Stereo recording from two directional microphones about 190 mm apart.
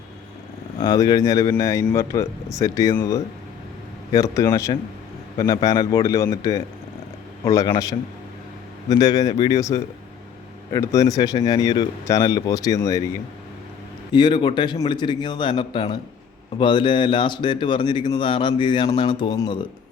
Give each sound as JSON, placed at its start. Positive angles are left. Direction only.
{"t": 0.8, "sound": "a man's voice", "side_deg": 20}
{"t": 14.1, "sound": "a man's voice", "side_deg": 25}